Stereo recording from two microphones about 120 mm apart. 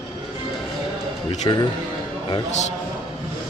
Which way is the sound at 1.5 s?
40° left (ahead or behind).